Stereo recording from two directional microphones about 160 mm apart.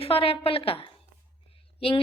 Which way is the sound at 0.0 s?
35° left (ahead or behind).